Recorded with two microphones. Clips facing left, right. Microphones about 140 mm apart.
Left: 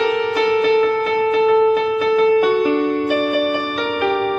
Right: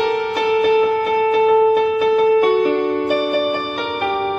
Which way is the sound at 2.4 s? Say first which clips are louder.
Right 1 dB; 60° right (ahead or behind).